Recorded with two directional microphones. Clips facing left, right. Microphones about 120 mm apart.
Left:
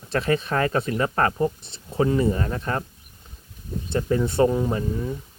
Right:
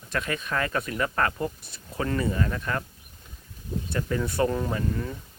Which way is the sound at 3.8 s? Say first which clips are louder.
Left 6 dB; 25° left (ahead or behind).